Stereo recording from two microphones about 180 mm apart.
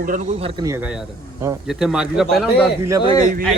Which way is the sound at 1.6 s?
5° right (ahead or behind).